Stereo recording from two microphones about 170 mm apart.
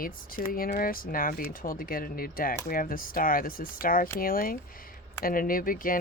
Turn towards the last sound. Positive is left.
turn(degrees=55)  # may be behind; listen again after turning